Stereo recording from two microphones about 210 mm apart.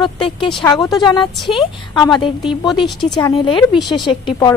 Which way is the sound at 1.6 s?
20° left (ahead or behind).